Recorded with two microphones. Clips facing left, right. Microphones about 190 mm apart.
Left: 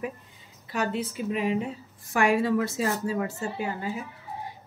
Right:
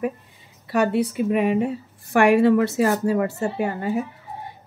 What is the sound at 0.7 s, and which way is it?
A woman's voice, 60° right (ahead or behind).